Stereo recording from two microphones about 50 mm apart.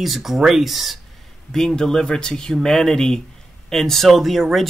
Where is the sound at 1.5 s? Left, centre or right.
Centre.